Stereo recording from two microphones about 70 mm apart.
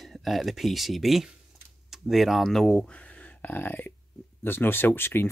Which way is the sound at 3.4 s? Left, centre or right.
Left.